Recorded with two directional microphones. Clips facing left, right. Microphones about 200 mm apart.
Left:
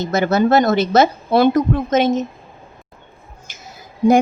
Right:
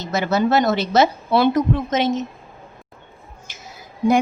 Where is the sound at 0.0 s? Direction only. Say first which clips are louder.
Left 4 dB; 50° left (ahead or behind).